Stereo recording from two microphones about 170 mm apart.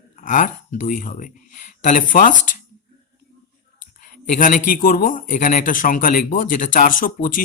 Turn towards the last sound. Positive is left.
turn(degrees=55)  # may be behind; listen again after turning